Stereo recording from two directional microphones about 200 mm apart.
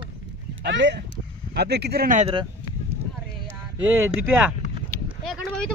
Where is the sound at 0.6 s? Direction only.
60° right (ahead or behind); by 2.3 s 45° right (ahead or behind).